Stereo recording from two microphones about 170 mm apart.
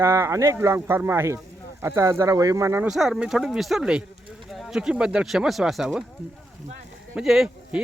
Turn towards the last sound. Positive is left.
turn(degrees=0)  # may be behind; listen again after turning